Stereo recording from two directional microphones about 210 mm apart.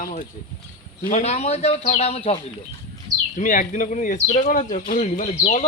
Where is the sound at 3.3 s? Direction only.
40° left (ahead or behind).